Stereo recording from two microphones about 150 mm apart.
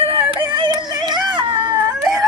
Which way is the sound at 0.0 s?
35° right (ahead or behind).